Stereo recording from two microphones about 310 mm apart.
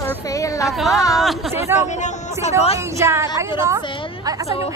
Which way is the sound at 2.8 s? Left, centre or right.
Centre.